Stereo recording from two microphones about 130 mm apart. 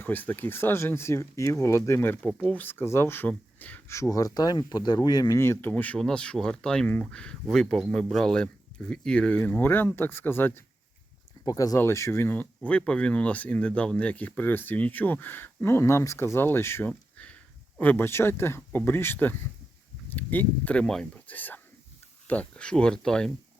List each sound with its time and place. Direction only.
0.0 s speech: 15° left (ahead or behind)
11.4 s speech: 25° left (ahead or behind); by 23.3 s 5° left (ahead or behind)